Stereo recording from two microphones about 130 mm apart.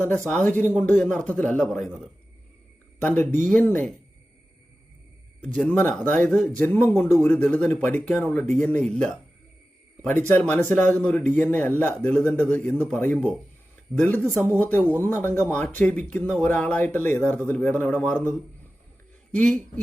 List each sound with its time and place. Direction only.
0.3 s speech: 15° left (ahead or behind)
3.0 s speech: 15° left (ahead or behind)
5.6 s speech: 15° left (ahead or behind)